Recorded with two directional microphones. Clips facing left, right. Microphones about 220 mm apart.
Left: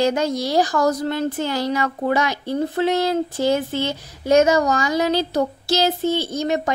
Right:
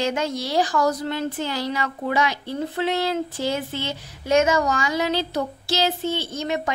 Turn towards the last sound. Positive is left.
turn(degrees=40)  # may be behind; listen again after turning